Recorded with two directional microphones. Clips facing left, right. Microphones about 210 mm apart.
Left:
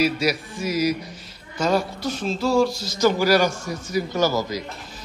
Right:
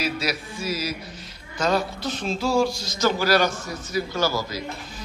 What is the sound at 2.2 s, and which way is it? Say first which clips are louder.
A man's voice: left 2 dB; centre (ahead or behind).